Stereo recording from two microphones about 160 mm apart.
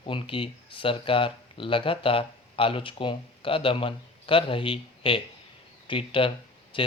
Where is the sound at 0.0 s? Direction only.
35° left (ahead or behind).